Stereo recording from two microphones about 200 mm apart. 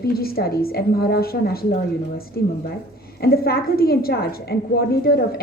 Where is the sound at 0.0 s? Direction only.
50° left (ahead or behind).